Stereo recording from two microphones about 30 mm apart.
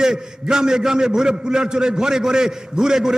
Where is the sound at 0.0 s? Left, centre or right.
Right.